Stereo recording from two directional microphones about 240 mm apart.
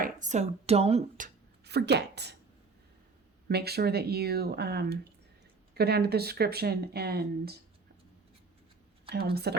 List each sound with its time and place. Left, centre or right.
0.0 s speech: right
3.5 s speech: right
9.0 s speech: right